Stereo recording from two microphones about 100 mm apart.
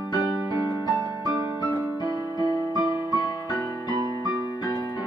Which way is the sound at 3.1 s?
45° left (ahead or behind).